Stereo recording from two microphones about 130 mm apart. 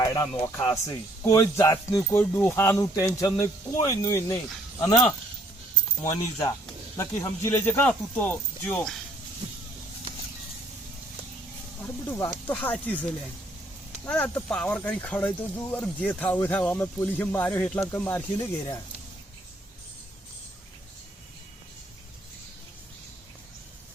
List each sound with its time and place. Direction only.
0.0 s speech: 25° left (ahead or behind)
6.9 s speech: 25° left (ahead or behind)
11.8 s speech: 20° left (ahead or behind)